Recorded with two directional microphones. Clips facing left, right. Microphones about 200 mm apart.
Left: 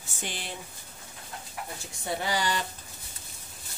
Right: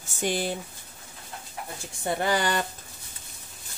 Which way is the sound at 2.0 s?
55° right (ahead or behind).